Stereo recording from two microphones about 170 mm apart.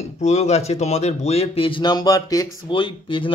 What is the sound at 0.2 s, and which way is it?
Speech, 40° left (ahead or behind).